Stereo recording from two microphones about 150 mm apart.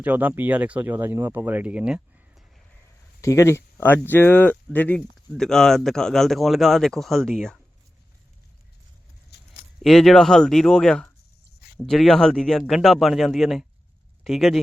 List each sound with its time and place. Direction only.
0.0 s speech: 10° right (ahead or behind)
3.2 s speech: 20° left (ahead or behind); by 7.6 s centre (ahead or behind)
9.3 s a sound: 90° left
9.8 s speech: centre (ahead or behind)